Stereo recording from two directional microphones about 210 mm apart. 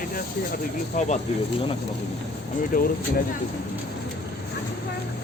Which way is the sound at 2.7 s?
40° left (ahead or behind).